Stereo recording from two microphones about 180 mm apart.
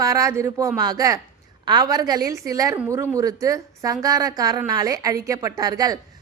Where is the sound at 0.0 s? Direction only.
20° right (ahead or behind).